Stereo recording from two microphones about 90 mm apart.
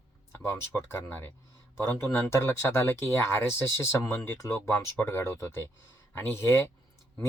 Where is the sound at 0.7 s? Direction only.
25° left (ahead or behind).